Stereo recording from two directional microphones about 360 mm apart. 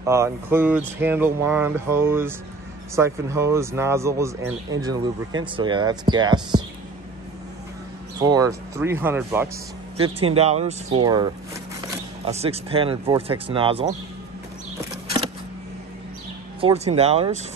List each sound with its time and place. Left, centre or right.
0.0 s speech: centre
8.2 s speech: centre
12.3 s speech: centre
16.6 s speech: centre